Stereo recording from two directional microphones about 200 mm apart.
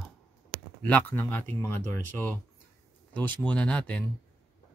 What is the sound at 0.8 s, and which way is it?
Speech, 10° left (ahead or behind).